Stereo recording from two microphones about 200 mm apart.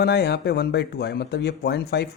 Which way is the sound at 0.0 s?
55° left (ahead or behind).